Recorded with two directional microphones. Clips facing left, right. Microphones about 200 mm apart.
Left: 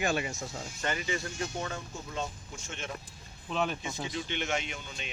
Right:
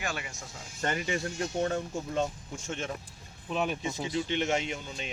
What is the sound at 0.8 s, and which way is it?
Speech, 50° right (ahead or behind).